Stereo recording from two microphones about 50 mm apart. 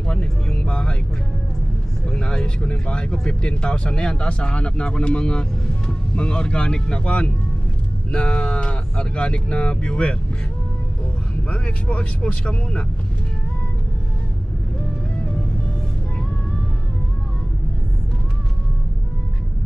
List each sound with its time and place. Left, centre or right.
0.0 s music: centre
2.0 s speech: centre
11.5 s speech: left